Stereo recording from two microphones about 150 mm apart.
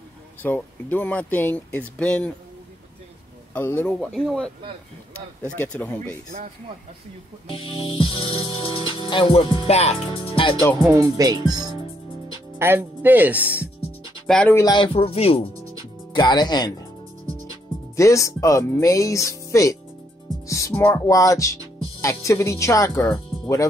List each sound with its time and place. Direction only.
0.4 s speech: 10° left (ahead or behind)
3.5 s speech: 10° left (ahead or behind)
4.0 s speech: centre (ahead or behind)
5.4 s speech: 10° left (ahead or behind)
7.5 s speech: 35° left (ahead or behind)
10.9 s music: 25° right (ahead or behind)
12.5 s speech: 15° right (ahead or behind)
14.2 s speech: 5° left (ahead or behind)
14.5 s speech: 20° left (ahead or behind)
14.8 s speech: 40° left (ahead or behind)
16.1 s speech: 30° left (ahead or behind)
17.9 s speech: 20° left (ahead or behind)